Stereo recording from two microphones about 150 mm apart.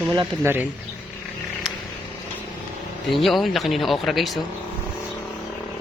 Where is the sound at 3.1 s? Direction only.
Centre (ahead or behind).